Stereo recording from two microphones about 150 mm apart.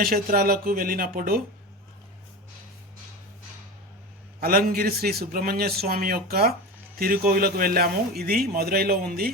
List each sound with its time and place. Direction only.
0.0 s speech: 80° right
4.4 s speech: 80° right
7.0 s speech: 75° right (ahead or behind)